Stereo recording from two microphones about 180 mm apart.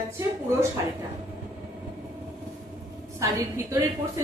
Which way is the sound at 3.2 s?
15° right (ahead or behind).